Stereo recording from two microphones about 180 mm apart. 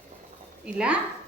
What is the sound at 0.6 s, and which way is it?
Speech, 5° right (ahead or behind).